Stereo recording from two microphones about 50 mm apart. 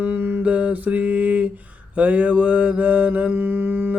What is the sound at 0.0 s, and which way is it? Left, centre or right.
Mantra, right.